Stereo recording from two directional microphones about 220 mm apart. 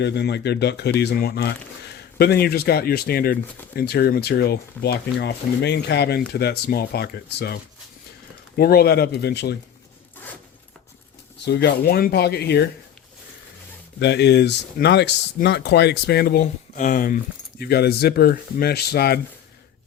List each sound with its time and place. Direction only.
0.0 s speech: 50° left (ahead or behind)
11.4 s speech: 45° left (ahead or behind)
14.0 s speech: 50° left (ahead or behind)